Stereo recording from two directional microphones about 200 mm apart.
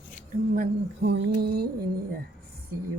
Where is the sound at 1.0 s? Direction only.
60° right (ahead or behind).